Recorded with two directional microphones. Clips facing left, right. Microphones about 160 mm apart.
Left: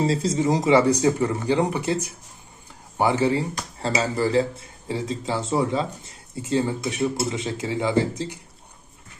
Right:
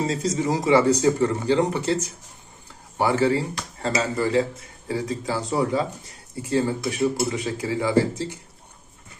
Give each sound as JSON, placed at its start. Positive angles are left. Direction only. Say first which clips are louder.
{"t": 0.0, "sound": "speech", "louder": "left 2 dB", "side_deg": 30}
{"t": 3.5, "sound": "speech", "louder": "even", "side_deg": 35}